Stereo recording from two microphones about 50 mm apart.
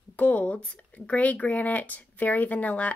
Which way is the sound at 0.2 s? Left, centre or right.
Left.